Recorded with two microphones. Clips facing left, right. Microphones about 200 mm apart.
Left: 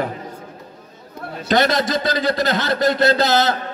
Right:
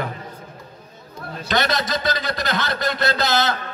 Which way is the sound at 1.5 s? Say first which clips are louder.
Left 5 dB; 35° left (ahead or behind).